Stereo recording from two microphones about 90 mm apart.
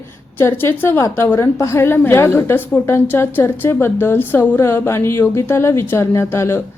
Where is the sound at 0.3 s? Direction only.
25° left (ahead or behind).